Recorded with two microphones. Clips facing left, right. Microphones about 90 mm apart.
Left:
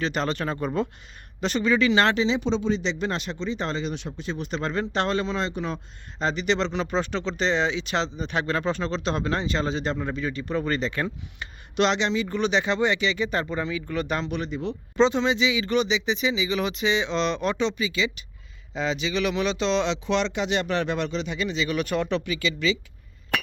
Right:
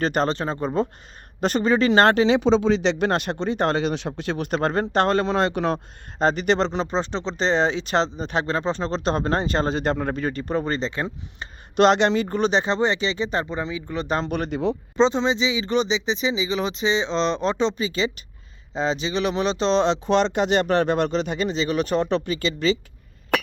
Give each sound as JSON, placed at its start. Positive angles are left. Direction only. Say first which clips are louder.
{"t": 0.0, "sound": "speech", "louder": "right 4 dB", "side_deg": -45}
{"t": 0.3, "sound": "speech", "louder": "right 3 dB", "side_deg": -30}
{"t": 1.4, "sound": "speech", "louder": "right 3 dB", "side_deg": -45}
{"t": 2.3, "sound": "speech", "louder": "right 6 dB", "side_deg": -80}
{"t": 6.1, "sound": "speech", "louder": "right 5 dB", "side_deg": -45}
{"t": 10.6, "sound": "speech", "louder": "right 1 dB", "side_deg": -30}
{"t": 11.8, "sound": "speech", "louder": "right 6 dB", "side_deg": -50}
{"t": 14.2, "sound": "speech", "louder": "right 4 dB", "side_deg": -50}
{"t": 14.9, "sound": "speech", "louder": "even", "side_deg": -25}